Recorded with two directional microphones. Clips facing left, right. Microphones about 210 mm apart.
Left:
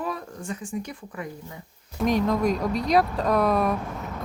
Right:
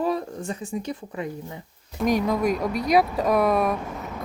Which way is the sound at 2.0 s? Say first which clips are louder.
Even; 5° right (ahead or behind).